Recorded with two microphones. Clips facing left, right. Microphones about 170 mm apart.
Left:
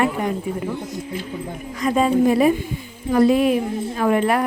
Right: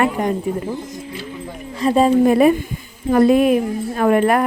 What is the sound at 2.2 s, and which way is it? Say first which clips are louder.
A woman's voice: right 3 dB; 55° right (ahead or behind).